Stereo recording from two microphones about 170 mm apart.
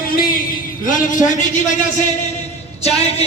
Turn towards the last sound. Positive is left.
turn(degrees=40)  # may be behind; listen again after turning